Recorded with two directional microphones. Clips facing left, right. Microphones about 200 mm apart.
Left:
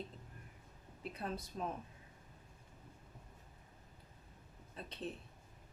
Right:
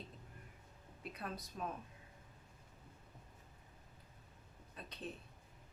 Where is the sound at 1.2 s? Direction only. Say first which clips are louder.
Left 3 dB; 25° left (ahead or behind).